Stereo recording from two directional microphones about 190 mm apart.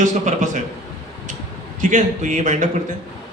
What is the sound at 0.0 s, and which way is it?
Speech, 40° right (ahead or behind).